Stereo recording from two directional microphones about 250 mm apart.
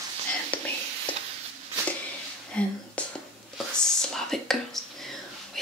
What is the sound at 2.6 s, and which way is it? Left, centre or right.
Whispering, centre.